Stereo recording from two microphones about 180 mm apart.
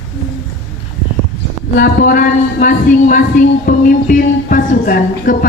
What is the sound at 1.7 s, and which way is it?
Speech, 50° left (ahead or behind).